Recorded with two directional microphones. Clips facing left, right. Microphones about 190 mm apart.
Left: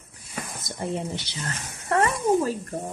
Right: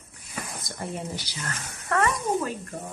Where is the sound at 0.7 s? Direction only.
25° left (ahead or behind).